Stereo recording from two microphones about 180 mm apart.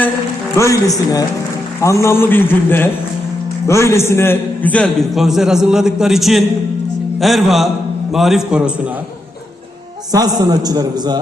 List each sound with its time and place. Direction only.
0.5 s a man's voice: 15° left (ahead or behind); by 8.7 s 5° right (ahead or behind)
10.1 s a man's voice: 20° right (ahead or behind)